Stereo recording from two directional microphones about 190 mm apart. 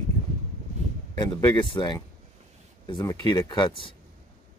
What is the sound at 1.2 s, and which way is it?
Speech, 20° left (ahead or behind).